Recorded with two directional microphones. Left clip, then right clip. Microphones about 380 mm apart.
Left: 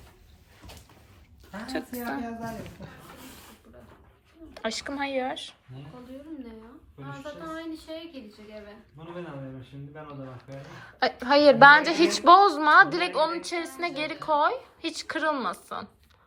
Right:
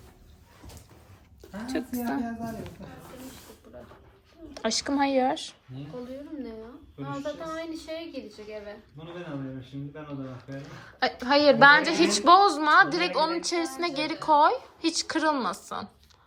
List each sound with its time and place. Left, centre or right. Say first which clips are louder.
1.6 s a woman's voice: right 2 dB; centre
4.5 s a woman's voice: right 4 dB; centre
7.1 s a child's voice: right 4 dB; right
10.5 s a woman's voice: right 1 dB; centre